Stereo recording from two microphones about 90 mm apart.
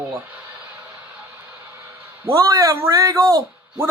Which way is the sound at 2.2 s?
40° right (ahead or behind).